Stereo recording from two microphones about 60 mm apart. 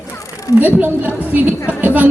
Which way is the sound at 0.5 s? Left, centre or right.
Right.